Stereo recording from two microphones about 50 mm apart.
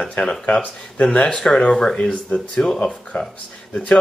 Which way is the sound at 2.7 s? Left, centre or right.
Left.